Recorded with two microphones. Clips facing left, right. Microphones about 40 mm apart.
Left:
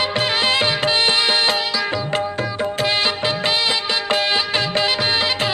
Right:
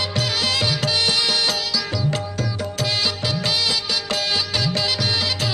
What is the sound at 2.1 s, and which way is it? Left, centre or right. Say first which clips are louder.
Music: left 4 dB; left.